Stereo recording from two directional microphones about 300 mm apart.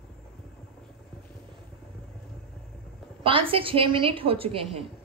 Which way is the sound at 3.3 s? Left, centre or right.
Centre.